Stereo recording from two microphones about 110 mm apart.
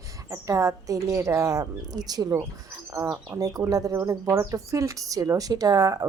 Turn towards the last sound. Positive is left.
turn(degrees=-35)  # may be behind; listen again after turning